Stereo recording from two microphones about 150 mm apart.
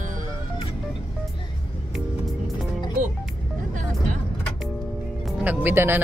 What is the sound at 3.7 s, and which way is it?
Vehicle, 55° right (ahead or behind).